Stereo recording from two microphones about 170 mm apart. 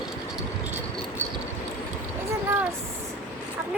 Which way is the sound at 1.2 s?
15° right (ahead or behind).